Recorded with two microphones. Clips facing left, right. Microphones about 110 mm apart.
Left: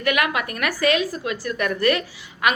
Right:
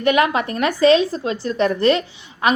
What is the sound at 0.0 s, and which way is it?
A woman's voice, 25° right (ahead or behind).